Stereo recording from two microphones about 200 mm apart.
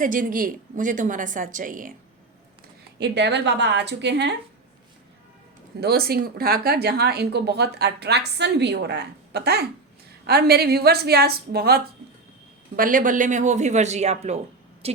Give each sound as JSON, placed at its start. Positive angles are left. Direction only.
{"t": 0.0, "sound": "a man's voice", "side_deg": -40}
{"t": 3.0, "sound": "speech", "side_deg": -60}
{"t": 5.8, "sound": "a woman's voice", "side_deg": -50}